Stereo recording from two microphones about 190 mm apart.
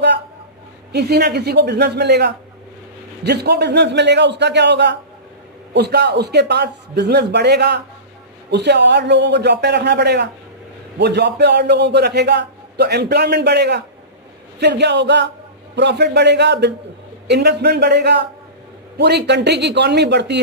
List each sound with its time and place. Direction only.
0.9 s a man's voice: 60° right (ahead or behind)